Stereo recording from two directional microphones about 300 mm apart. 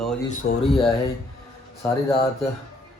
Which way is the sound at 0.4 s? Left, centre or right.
Left.